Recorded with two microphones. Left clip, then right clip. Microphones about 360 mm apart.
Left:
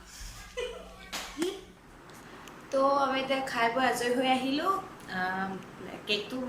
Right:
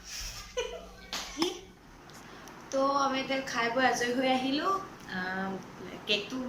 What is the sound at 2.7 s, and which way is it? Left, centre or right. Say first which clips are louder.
A woman's voice: left 2 dB; centre.